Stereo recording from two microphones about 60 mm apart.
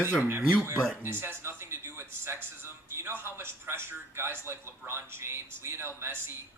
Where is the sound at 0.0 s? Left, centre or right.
Right.